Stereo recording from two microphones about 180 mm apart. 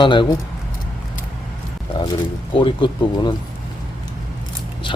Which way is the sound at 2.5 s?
30° left (ahead or behind).